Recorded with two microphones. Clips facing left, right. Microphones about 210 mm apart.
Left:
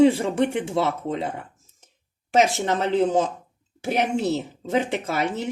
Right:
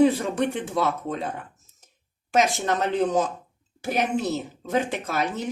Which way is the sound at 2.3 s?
30° left (ahead or behind).